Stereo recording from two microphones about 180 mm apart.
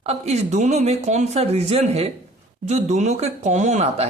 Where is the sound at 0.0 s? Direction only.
35° right (ahead or behind).